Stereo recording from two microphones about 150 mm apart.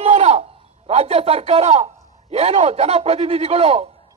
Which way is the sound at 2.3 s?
45° right (ahead or behind).